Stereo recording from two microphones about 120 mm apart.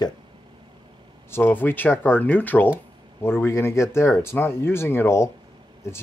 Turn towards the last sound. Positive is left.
turn(degrees=20)  # may be behind; listen again after turning